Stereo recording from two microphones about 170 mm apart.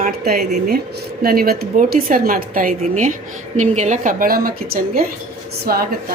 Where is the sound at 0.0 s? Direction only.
60° right (ahead or behind).